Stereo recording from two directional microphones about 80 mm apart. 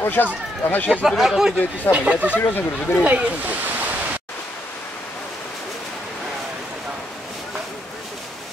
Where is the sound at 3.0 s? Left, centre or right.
Centre.